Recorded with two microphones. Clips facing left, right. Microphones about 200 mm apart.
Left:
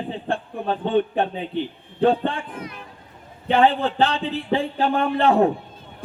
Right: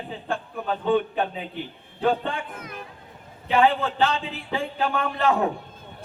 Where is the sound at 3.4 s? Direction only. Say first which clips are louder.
Left 2 dB; 35° left (ahead or behind).